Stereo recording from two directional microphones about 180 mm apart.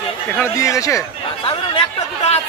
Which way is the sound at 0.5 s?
15° left (ahead or behind).